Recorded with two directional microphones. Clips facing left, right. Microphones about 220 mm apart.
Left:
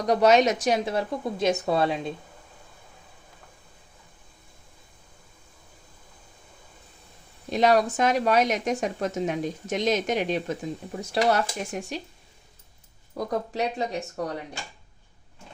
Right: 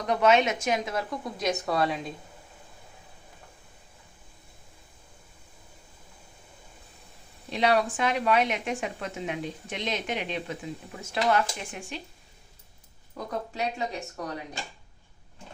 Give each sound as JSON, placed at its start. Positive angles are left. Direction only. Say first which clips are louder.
{"t": 0.0, "sound": "speech", "louder": "left 3 dB", "side_deg": 40}
{"t": 7.5, "sound": "a woman's voice", "louder": "left 4 dB", "side_deg": 45}
{"t": 13.1, "sound": "speech", "louder": "left 5 dB", "side_deg": 35}